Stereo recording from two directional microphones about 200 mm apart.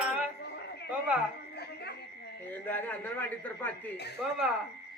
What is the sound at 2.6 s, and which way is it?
A man's voice, 10° left (ahead or behind).